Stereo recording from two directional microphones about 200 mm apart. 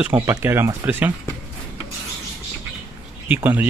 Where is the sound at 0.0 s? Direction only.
10° right (ahead or behind).